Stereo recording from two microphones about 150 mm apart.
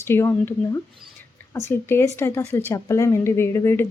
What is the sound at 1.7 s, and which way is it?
A woman's voice, 15° left (ahead or behind).